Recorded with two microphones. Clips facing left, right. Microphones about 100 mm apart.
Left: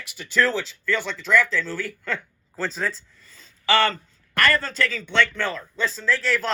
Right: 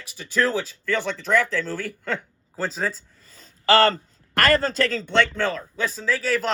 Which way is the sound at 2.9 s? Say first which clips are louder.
Even; 45° right (ahead or behind).